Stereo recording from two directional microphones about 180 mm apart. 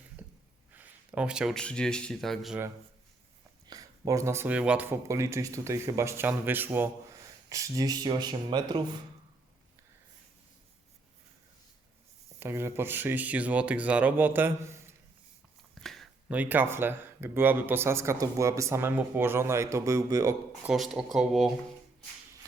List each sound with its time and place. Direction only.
0.2 s a sound: 10° right (ahead or behind)
0.7 s speech: 10° right (ahead or behind)
3.7 s speech: 20° right (ahead or behind)
12.4 s speech: 15° right (ahead or behind)
15.8 s speech: centre (ahead or behind); by 20.3 s 20° right (ahead or behind)
20.7 s speech: centre (ahead or behind)